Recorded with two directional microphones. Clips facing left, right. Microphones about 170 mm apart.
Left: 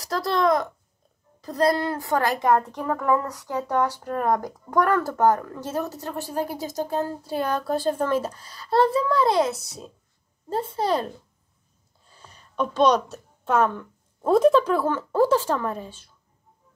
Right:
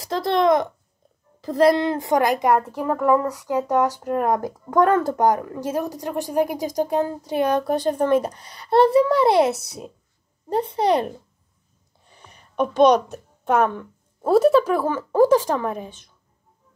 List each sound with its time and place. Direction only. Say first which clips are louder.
0.0 s speech: right 3 dB; 25° right (ahead or behind)
10.5 s speech: right 4 dB; 20° right (ahead or behind)
12.7 s speech: right 4 dB; 15° right (ahead or behind)